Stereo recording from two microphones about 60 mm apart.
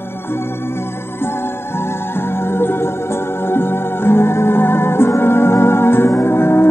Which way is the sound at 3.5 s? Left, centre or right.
Left.